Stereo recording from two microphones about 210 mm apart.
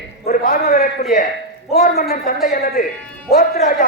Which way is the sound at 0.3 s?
45° left (ahead or behind).